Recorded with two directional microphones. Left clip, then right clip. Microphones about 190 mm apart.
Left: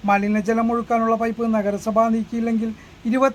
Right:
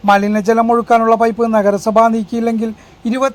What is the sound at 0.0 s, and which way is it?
A man's voice, 20° right (ahead or behind).